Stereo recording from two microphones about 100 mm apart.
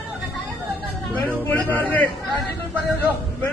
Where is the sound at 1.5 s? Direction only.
20° left (ahead or behind).